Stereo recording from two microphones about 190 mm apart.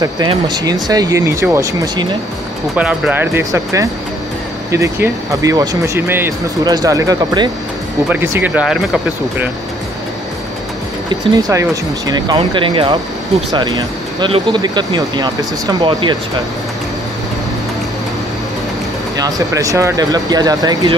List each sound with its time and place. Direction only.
0.8 s speech: 20° right (ahead or behind)
2.7 s speech: 5° right (ahead or behind)
11.3 s speech: 15° right (ahead or behind)
19.1 s speech: 20° right (ahead or behind)